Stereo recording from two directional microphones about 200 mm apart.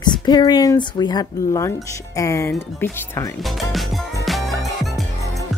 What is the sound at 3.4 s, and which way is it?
Music, centre (ahead or behind).